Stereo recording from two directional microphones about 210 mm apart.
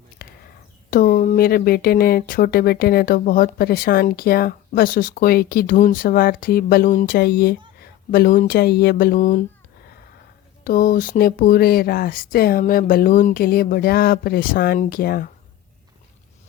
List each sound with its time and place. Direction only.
0.2 s a sound: 45° left (ahead or behind)
0.9 s speech: 45° left (ahead or behind)
10.6 s speech: 45° left (ahead or behind)